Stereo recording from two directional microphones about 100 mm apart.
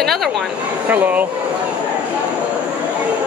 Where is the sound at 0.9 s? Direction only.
15° right (ahead or behind).